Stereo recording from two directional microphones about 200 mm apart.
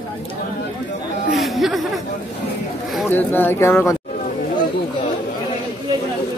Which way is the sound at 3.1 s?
10° left (ahead or behind).